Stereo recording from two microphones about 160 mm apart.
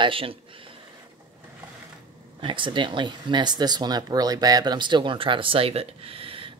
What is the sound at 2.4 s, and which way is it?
Speech, 30° right (ahead or behind).